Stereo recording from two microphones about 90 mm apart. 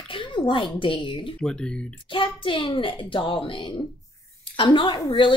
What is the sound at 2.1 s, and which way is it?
Speech, 70° left (ahead or behind).